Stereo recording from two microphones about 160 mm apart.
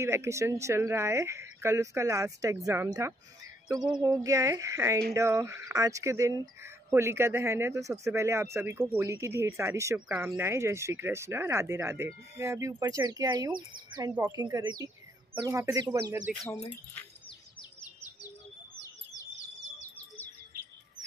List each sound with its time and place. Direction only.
0.0 s speech: 15° right (ahead or behind)
9.9 s speech: 5° right (ahead or behind)
16.3 s speech: 5° right (ahead or behind)
19.3 s chirp: 20° left (ahead or behind)